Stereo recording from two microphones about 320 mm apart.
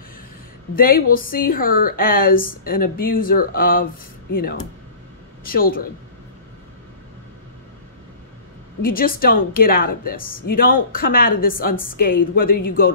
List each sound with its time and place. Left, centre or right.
0.7 s a woman's voice: left
5.5 s a woman's voice: left
8.8 s a woman's voice: left